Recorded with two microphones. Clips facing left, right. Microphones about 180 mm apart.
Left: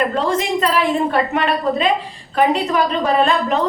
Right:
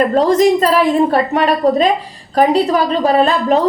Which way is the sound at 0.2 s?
40° right (ahead or behind).